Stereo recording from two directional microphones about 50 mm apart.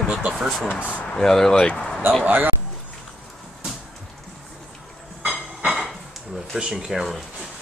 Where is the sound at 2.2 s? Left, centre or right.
Right.